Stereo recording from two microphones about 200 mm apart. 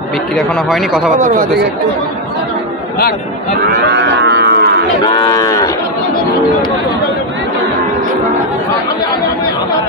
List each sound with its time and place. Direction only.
0.4 s speech: centre (ahead or behind)
1.1 s speech: 40° right (ahead or behind)
3.9 s cattle: 60° right (ahead or behind)
5.0 s moo: 20° left (ahead or behind)